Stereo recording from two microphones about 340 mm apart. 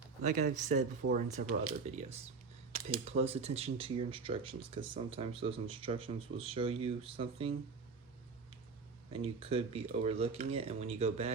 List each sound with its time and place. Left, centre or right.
0.2 s speech: right
9.1 s speech: centre